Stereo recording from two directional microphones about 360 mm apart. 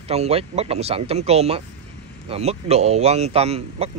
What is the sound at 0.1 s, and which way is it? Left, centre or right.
A man's voice, centre.